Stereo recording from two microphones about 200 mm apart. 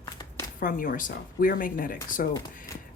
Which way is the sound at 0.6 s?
40° left (ahead or behind).